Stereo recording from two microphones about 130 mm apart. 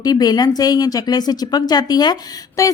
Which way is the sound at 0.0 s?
30° left (ahead or behind).